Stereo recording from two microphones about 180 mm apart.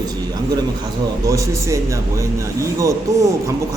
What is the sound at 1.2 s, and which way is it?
Speech, 15° right (ahead or behind).